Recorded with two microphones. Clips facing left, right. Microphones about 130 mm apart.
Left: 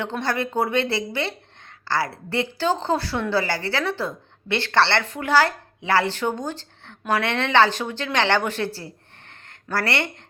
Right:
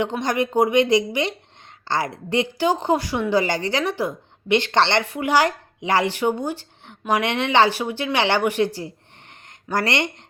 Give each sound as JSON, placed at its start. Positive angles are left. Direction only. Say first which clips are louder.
{"t": 0.0, "sound": "a woman's voice", "louder": "right 3 dB", "side_deg": -15}